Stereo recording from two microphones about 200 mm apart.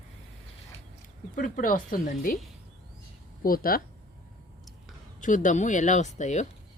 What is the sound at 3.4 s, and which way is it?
Speech, 45° left (ahead or behind).